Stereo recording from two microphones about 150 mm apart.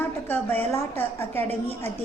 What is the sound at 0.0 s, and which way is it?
A woman's voice, 15° left (ahead or behind).